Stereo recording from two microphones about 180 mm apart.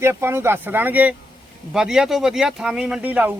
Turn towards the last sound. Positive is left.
turn(degrees=-10)  # may be behind; listen again after turning